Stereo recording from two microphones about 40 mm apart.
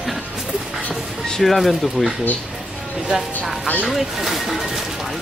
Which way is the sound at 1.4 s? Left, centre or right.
Centre.